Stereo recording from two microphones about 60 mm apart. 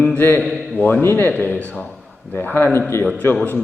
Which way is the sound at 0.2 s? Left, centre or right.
Left.